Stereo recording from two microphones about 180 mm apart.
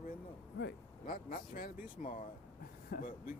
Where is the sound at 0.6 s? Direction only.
70° left (ahead or behind).